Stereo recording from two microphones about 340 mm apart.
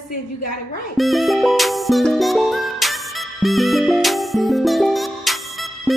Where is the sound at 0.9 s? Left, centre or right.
Centre.